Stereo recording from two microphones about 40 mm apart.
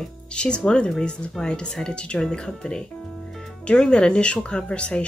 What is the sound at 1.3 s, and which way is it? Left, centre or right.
Speech, centre.